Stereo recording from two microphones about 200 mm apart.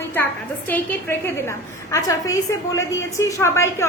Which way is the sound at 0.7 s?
10° left (ahead or behind).